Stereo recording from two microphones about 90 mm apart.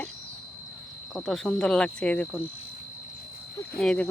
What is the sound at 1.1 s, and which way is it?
Speech, 5° left (ahead or behind).